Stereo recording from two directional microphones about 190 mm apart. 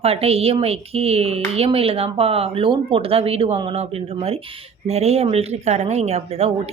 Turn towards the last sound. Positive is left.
turn(degrees=-35)  # may be behind; listen again after turning